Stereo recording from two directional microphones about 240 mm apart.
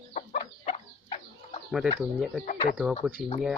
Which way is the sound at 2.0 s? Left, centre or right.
Centre.